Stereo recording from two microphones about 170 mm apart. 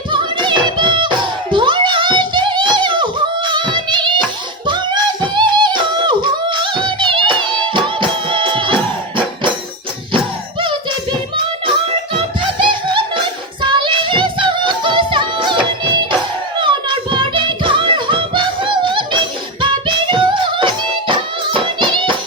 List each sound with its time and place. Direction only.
0.1 s music: 30° right (ahead or behind)
4.6 s singing: 25° right (ahead or behind)
12.4 s music: 30° right (ahead or behind)